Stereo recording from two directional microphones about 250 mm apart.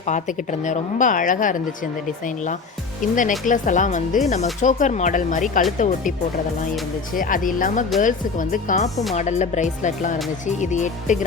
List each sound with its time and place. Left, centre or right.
0.0 s speech: left
7.1 s speech: left